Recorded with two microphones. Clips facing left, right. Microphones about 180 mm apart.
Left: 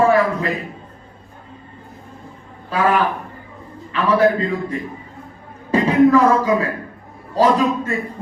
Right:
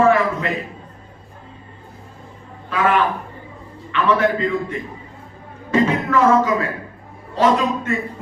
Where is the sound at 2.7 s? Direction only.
35° left (ahead or behind).